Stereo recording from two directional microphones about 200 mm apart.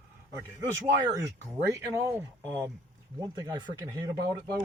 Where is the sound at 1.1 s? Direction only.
15° right (ahead or behind).